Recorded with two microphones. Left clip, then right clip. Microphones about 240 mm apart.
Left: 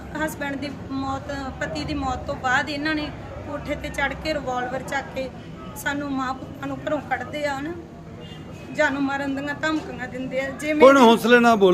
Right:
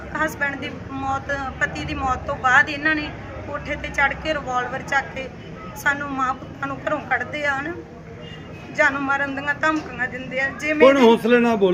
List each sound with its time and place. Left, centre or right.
0.1 s speech: centre
5.8 s speech: centre
8.8 s speech: centre